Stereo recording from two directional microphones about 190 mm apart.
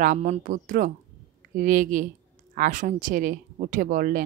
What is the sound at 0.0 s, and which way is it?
A woman's voice, 40° right (ahead or behind).